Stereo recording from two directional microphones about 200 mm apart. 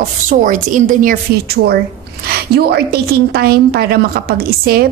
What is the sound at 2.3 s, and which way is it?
A woman's voice, 50° right (ahead or behind).